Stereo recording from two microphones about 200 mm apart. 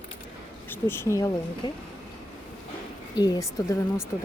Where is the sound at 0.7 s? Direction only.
10° left (ahead or behind).